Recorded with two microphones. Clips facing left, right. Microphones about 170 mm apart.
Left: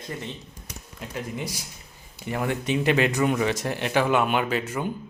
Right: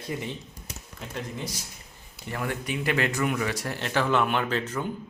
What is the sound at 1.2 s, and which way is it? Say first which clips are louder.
Speech: left 3 dB; 10° left (ahead or behind).